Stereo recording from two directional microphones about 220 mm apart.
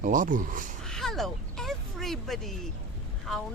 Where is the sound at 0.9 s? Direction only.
Centre (ahead or behind).